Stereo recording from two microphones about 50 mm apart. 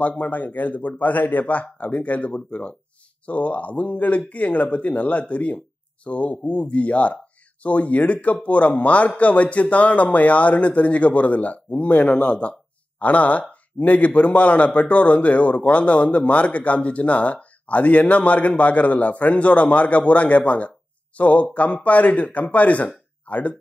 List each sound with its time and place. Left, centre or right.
0.2 s a man's voice: left